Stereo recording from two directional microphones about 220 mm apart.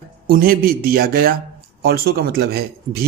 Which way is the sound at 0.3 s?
40° right (ahead or behind).